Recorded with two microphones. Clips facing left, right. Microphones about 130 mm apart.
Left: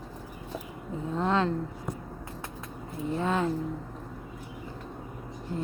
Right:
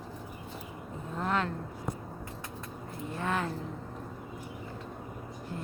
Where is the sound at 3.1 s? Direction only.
20° left (ahead or behind).